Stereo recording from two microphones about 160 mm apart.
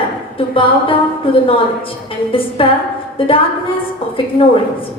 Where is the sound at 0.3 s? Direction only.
35° left (ahead or behind).